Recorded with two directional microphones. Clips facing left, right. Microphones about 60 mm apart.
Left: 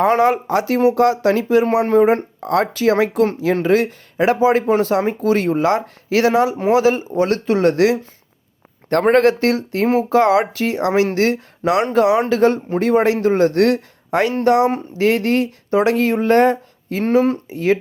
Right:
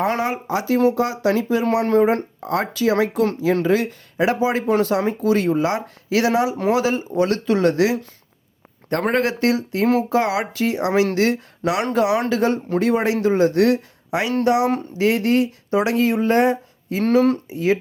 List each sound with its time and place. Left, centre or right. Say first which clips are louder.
0.2 s speech: left 7 dB; left
1.6 s speech: even; left
2.4 s speech: left 4 dB; left
9.1 s speech: left 3 dB; left
9.8 s speech: left 2 dB; left
10.1 s speech: left 6 dB; left
17.0 s speech: left 1 dB; left
17.5 s speech: left 2 dB; left